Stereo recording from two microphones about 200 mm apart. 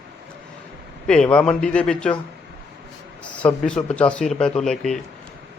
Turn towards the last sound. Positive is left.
turn(degrees=0)  # may be behind; listen again after turning